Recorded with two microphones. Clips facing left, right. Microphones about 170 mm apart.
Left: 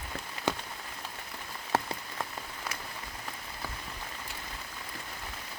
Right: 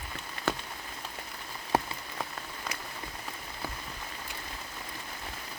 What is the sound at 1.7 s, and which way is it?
Rain on surface, 15° right (ahead or behind).